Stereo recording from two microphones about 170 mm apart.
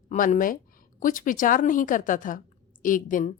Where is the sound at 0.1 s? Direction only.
50° left (ahead or behind).